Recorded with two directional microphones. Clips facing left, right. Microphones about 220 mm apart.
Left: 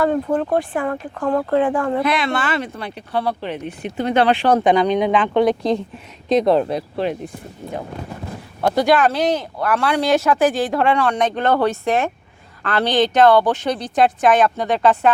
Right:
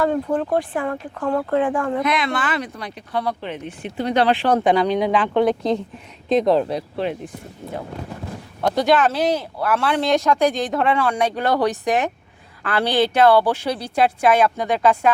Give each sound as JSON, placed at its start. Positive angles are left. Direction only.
{"t": 0.0, "sound": "speech", "side_deg": 55}
{"t": 3.9, "sound": "speech", "side_deg": 55}
{"t": 4.3, "sound": "speech", "side_deg": 90}
{"t": 8.6, "sound": "speech", "side_deg": 0}